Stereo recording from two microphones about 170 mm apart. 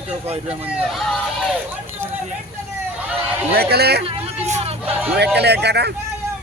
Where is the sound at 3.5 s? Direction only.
65° right (ahead or behind).